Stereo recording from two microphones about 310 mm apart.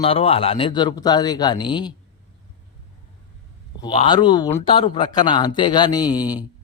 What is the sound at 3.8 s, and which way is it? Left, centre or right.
A man's voice, centre.